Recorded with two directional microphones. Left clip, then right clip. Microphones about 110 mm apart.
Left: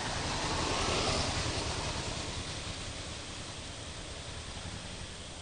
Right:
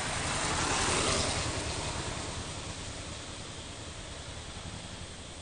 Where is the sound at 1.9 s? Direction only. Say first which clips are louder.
Even; 5° right (ahead or behind).